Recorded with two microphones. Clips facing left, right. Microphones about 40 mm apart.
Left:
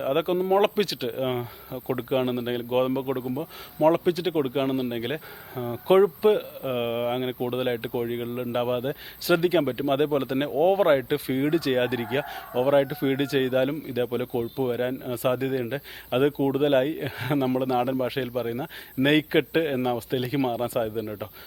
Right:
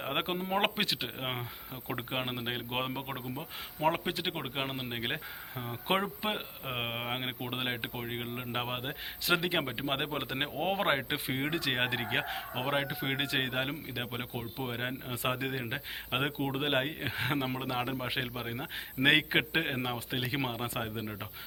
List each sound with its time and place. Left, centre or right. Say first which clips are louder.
0.0 s speech: left 10 dB; right